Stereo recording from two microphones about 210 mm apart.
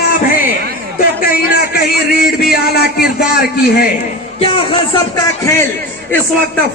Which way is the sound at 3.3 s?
50° left (ahead or behind).